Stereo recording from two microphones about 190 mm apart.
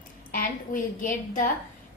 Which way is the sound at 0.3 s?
45° left (ahead or behind).